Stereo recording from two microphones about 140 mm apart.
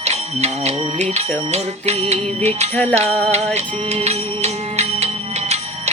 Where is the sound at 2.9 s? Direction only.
50° right (ahead or behind).